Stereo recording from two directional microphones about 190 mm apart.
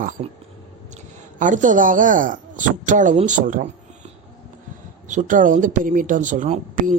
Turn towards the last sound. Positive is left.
turn(degrees=-45)  # may be behind; listen again after turning